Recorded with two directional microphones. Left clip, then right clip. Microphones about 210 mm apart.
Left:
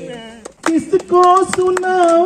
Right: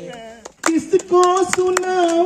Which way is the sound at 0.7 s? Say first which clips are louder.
Left 2 dB; 50° right (ahead or behind).